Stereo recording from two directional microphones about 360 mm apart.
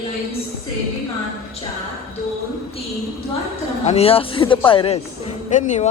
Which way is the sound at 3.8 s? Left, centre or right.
Centre.